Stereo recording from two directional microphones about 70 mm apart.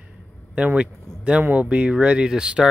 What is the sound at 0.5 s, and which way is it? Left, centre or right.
Speech, centre.